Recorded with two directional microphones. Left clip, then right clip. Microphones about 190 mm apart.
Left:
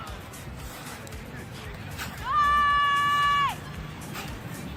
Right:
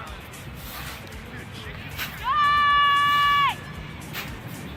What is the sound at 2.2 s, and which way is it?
Run, 55° left (ahead or behind).